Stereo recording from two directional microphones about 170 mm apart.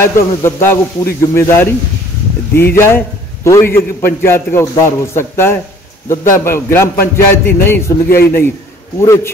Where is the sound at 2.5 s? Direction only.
15° left (ahead or behind).